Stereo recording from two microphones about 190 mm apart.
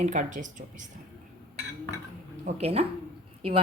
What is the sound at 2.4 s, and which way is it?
Speech, 35° right (ahead or behind).